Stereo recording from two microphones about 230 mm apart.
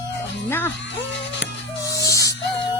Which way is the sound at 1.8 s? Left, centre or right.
Centre.